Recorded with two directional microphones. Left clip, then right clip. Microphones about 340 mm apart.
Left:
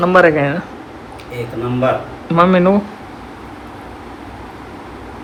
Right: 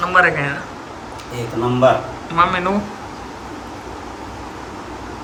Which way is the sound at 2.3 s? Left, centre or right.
Centre.